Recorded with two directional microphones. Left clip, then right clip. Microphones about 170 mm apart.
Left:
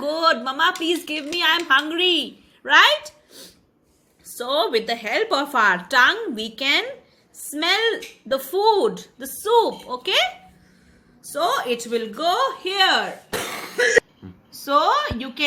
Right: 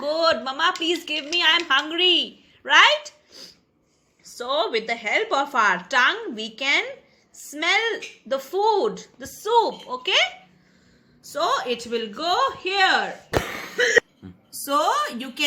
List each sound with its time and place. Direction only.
0.0 s speech: 30° left (ahead or behind)
4.4 s speech: 35° left (ahead or behind)
11.2 s a woman's voice: 20° left (ahead or behind)
11.9 s speech: centre (ahead or behind)
14.5 s a woman's voice: 10° right (ahead or behind)